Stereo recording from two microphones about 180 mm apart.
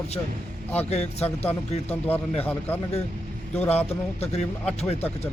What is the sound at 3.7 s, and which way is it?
Speech, 35° left (ahead or behind).